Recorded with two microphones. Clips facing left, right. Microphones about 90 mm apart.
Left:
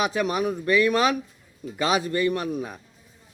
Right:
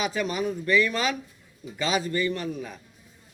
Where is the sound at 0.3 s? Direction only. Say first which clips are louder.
Left 2 dB; 55° left (ahead or behind).